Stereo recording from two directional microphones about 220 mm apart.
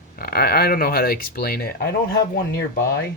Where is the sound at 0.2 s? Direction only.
45° left (ahead or behind).